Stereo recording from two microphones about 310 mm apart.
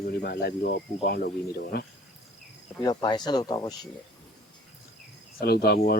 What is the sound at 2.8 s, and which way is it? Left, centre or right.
Speech, centre.